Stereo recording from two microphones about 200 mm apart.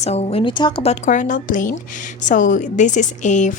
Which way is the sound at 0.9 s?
40° left (ahead or behind).